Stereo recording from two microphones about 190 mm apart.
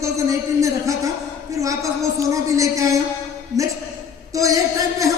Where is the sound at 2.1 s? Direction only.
15° right (ahead or behind).